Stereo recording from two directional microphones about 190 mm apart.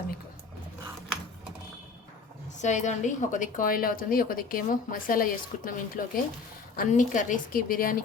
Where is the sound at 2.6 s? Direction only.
40° left (ahead or behind).